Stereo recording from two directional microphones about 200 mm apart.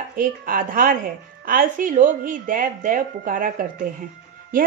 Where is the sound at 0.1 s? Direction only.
45° right (ahead or behind).